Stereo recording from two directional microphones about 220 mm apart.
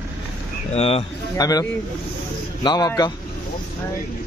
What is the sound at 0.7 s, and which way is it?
A man's voice, 25° left (ahead or behind).